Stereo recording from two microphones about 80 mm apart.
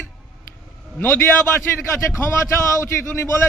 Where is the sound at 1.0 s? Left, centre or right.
Left.